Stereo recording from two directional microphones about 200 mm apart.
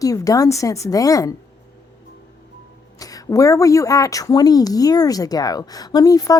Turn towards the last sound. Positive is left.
turn(degrees=15)  # may be behind; listen again after turning